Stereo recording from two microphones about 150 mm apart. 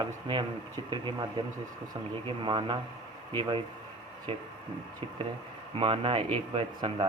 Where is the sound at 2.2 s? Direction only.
35° right (ahead or behind).